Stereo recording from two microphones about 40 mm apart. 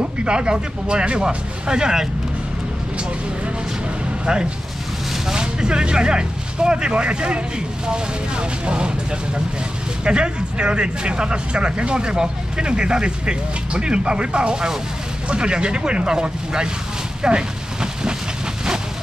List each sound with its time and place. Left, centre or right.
0.2 s speech: right
5.3 s speech: right
10.0 s speech: right